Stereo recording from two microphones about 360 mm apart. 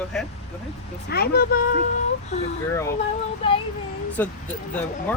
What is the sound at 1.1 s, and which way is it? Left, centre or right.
Speech, left.